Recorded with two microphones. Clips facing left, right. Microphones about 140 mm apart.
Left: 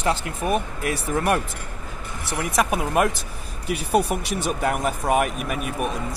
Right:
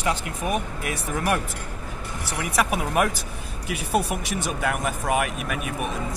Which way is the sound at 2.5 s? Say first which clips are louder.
Left 2 dB; 5° right (ahead or behind).